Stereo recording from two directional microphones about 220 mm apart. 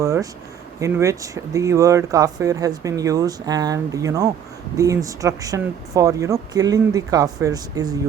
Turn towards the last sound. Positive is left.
turn(degrees=-15)  # may be behind; listen again after turning